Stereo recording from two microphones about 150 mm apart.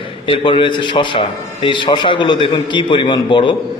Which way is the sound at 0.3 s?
35° left (ahead or behind).